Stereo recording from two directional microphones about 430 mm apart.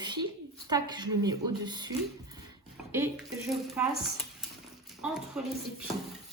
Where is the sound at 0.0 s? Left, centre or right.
Centre.